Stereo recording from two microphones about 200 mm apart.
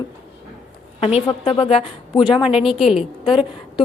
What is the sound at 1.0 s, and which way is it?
A woman's voice, 30° left (ahead or behind).